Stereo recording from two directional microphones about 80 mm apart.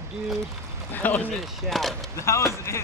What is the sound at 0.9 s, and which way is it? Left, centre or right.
Speech, left.